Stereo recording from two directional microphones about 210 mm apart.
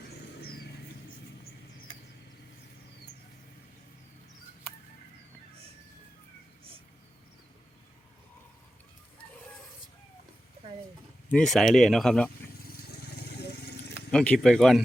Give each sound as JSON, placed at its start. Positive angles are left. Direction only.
{"t": 0.1, "sound": "a sound", "side_deg": 50}
{"t": 11.3, "sound": "speech", "side_deg": 0}
{"t": 12.6, "sound": "vehicle", "side_deg": 50}
{"t": 13.9, "sound": "speech", "side_deg": 5}